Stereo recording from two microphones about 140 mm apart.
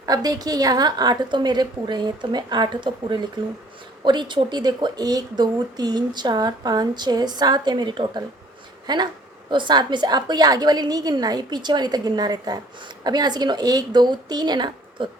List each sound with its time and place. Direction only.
0.0 s a woman's voice: 30° right (ahead or behind)